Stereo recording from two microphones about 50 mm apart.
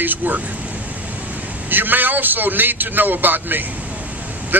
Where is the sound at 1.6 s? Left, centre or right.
Right.